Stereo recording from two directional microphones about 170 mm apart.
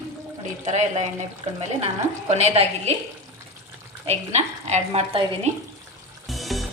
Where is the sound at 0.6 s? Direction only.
45° right (ahead or behind).